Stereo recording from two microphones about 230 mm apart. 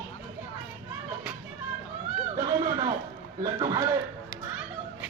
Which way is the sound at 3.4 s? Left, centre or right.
Centre.